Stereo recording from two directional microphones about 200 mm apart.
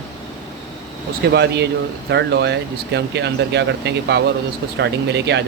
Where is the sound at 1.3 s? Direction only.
55° right (ahead or behind).